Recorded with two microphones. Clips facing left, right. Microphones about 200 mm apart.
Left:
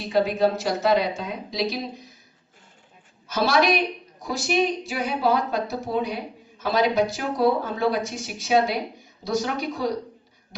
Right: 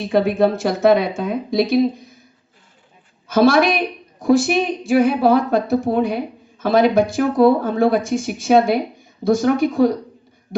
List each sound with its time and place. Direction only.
0.1 s speech: 55° right (ahead or behind)
3.2 s a woman's voice: 50° right (ahead or behind)